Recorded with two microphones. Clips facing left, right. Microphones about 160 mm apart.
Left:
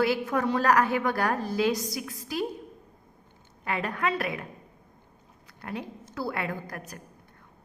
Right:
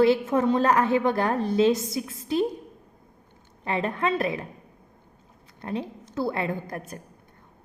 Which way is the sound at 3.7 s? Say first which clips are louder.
Right 3 dB; 25° right (ahead or behind).